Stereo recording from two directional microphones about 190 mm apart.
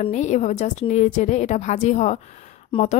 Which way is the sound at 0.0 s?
40° left (ahead or behind).